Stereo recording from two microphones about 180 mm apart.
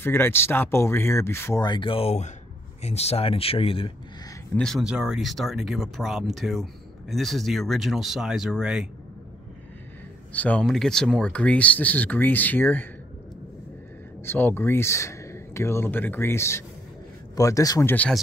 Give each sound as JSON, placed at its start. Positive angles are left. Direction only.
{"t": 0.0, "sound": "speech", "side_deg": 15}
{"t": 4.6, "sound": "speech", "side_deg": 0}
{"t": 10.3, "sound": "speech", "side_deg": 10}
{"t": 14.2, "sound": "speech", "side_deg": 10}
{"t": 17.9, "sound": "speech", "side_deg": 5}